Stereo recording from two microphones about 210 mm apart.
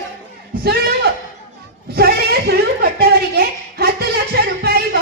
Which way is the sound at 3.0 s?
45° right (ahead or behind).